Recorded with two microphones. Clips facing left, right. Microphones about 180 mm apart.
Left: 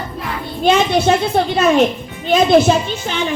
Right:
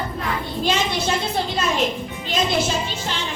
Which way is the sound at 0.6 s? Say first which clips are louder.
Left 10 dB; 60° left (ahead or behind).